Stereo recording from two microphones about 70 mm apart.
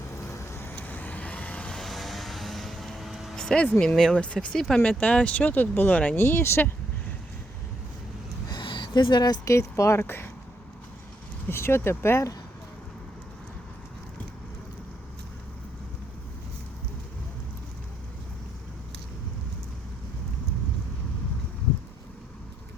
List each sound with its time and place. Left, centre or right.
0.1 s vehicle: left
0.8 s vehicle: left
1.7 s vehicle: centre
3.3 s vehicle: centre
3.6 s speech: centre
6.1 s speech: left
8.4 s a sound: left
9.4 s speech: left
10.0 s speech: left
11.4 s speech: left